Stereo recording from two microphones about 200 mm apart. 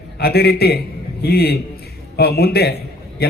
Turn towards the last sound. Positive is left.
turn(degrees=50)  # may be behind; listen again after turning